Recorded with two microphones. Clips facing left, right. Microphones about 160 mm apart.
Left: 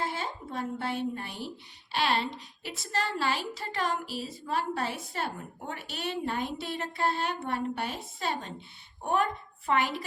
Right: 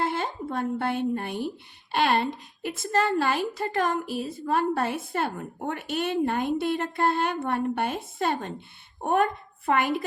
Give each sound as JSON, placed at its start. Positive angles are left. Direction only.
{"t": 0.0, "sound": "a woman's voice", "side_deg": -60}